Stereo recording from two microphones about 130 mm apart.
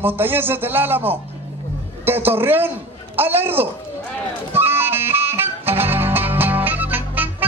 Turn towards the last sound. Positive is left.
turn(degrees=-15)  # may be behind; listen again after turning